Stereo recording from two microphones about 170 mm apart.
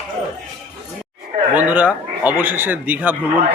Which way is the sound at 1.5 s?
10° right (ahead or behind).